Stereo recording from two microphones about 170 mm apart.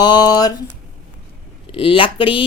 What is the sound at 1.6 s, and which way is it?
Speech, 30° left (ahead or behind).